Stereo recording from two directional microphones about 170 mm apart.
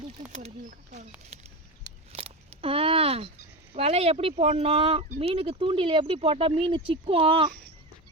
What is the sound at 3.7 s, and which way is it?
Speech, 35° right (ahead or behind).